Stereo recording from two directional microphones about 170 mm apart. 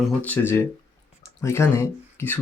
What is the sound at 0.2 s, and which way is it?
Speech, 10° left (ahead or behind).